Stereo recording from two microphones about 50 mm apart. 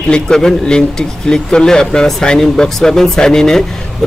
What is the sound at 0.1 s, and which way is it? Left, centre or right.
A man's voice, centre.